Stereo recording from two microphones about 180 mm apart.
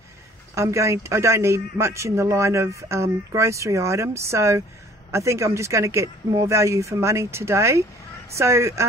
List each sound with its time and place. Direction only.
0.6 s a man's voice: 15° right (ahead or behind)